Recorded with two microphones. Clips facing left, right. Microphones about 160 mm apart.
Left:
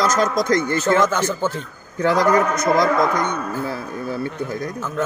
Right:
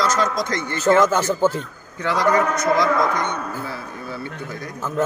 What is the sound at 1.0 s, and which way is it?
Speech, 5° right (ahead or behind).